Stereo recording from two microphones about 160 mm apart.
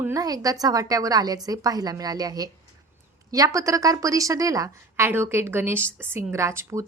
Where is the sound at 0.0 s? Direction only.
20° right (ahead or behind).